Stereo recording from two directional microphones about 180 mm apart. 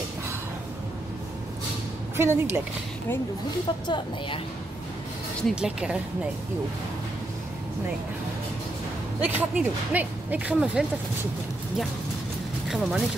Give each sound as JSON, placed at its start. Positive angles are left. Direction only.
{"t": 2.1, "sound": "speech", "side_deg": -15}
{"t": 3.8, "sound": "a woman's voice", "side_deg": 25}
{"t": 5.4, "sound": "speech", "side_deg": -5}
{"t": 9.2, "sound": "speech", "side_deg": -10}
{"t": 12.6, "sound": "speech", "side_deg": 0}